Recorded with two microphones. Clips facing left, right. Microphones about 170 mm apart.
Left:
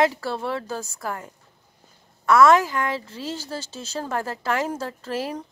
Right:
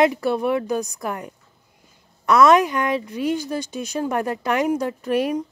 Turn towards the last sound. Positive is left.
turn(degrees=-20)  # may be behind; listen again after turning